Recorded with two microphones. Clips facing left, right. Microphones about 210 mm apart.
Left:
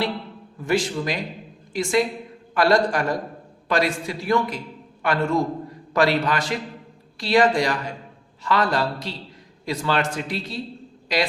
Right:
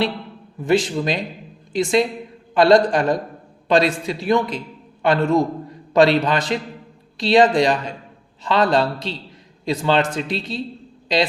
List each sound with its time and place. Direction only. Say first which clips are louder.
0.6 s a man's voice: right 4 dB; 20° right (ahead or behind)